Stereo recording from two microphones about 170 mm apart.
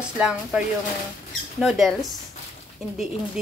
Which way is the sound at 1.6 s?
Centre (ahead or behind).